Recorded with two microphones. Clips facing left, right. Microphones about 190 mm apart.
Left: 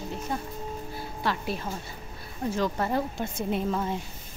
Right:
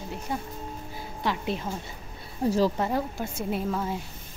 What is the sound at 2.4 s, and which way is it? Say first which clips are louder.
Speech: right 5 dB; 35° right (ahead or behind).